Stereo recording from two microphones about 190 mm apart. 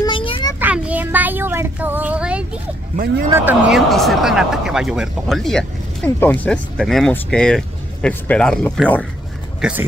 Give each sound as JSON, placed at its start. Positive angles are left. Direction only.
{"t": 0.0, "sound": "a sound", "side_deg": 25}
{"t": 0.6, "sound": "child singing", "side_deg": -10}
{"t": 3.3, "sound": "speech", "side_deg": -10}
{"t": 9.6, "sound": "speech", "side_deg": -5}